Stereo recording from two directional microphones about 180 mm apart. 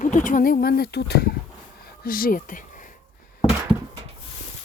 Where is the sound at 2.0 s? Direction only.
50° left (ahead or behind).